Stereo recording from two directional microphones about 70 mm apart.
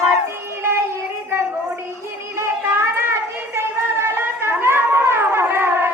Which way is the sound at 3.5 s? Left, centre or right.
Right.